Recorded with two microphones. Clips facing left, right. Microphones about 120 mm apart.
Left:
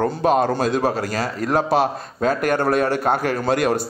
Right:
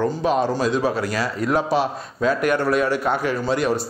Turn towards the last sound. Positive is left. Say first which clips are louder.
# left 2 dB
turn(degrees=55)  # may be behind; listen again after turning